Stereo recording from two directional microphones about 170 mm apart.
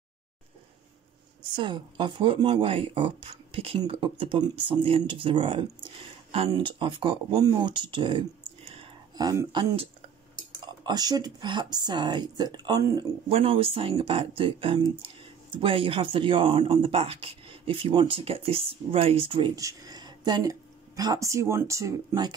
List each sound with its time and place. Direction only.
1.5 s speech: 30° right (ahead or behind)
9.1 s speech: 20° right (ahead or behind)
10.9 s speech: 20° right (ahead or behind)
13.3 s speech: 35° right (ahead or behind)